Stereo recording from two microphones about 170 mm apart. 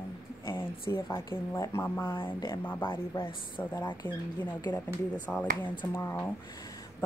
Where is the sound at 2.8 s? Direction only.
30° left (ahead or behind).